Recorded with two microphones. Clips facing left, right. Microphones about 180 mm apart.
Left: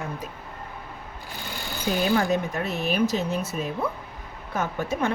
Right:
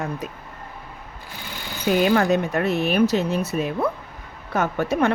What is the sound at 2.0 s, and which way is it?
Speech, 75° right (ahead or behind).